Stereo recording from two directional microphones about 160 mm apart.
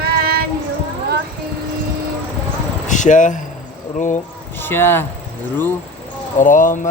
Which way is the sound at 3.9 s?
50° left (ahead or behind).